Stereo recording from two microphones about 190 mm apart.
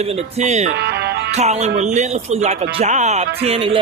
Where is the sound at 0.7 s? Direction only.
60° right (ahead or behind).